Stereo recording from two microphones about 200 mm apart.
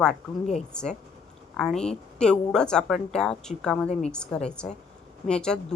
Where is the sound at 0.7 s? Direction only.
5° left (ahead or behind).